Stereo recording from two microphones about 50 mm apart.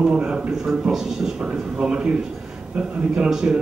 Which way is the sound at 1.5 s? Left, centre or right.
Right.